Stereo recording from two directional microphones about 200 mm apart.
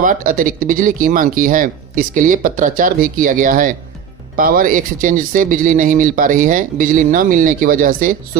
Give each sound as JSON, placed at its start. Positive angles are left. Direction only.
{"t": 0.0, "sound": "speech", "side_deg": -40}